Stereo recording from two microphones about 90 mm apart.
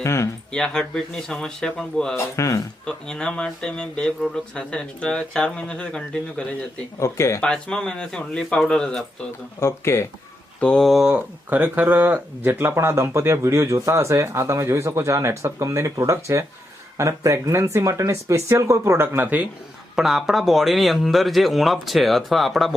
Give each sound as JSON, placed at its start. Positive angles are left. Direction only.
{"t": 0.0, "sound": "speech", "side_deg": 30}
{"t": 0.5, "sound": "speech", "side_deg": 10}
{"t": 2.1, "sound": "speech", "side_deg": 35}
{"t": 2.8, "sound": "speech", "side_deg": 10}
{"t": 7.0, "sound": "speech", "side_deg": 35}
{"t": 7.4, "sound": "speech", "side_deg": 10}
{"t": 9.6, "sound": "speech", "side_deg": 30}
{"t": 10.6, "sound": "speech", "side_deg": 10}
{"t": 10.8, "sound": "speech", "side_deg": -5}
{"t": 11.4, "sound": "speech", "side_deg": -20}
{"t": 20.0, "sound": "speech", "side_deg": -5}